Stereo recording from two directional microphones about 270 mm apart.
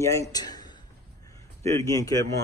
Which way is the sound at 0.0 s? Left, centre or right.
Centre.